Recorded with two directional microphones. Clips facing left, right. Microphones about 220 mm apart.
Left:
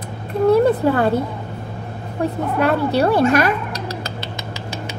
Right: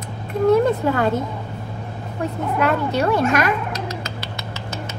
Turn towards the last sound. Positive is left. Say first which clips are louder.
# left 2 dB
turn(degrees=35)  # may be behind; listen again after turning